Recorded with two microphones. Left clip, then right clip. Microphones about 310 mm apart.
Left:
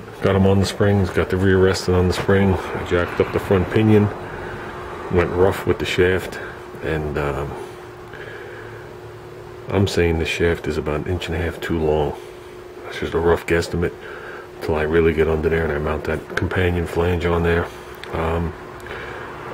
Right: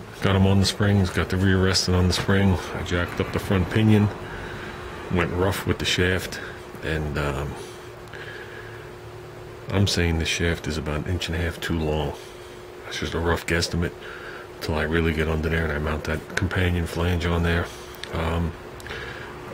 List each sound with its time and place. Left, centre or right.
0.2 s speech: centre
5.1 s speech: centre
9.7 s speech: centre
13.0 s speech: centre